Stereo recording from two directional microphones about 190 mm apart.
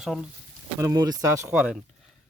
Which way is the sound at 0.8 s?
15° right (ahead or behind).